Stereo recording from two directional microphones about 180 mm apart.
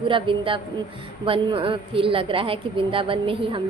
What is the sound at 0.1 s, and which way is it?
A woman's voice, 30° right (ahead or behind).